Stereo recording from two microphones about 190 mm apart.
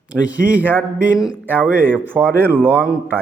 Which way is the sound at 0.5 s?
10° right (ahead or behind).